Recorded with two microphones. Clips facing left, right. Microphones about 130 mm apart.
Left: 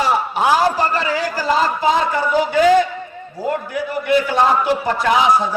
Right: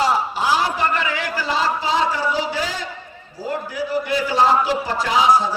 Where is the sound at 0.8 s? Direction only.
35° left (ahead or behind); by 4.7 s 55° left (ahead or behind).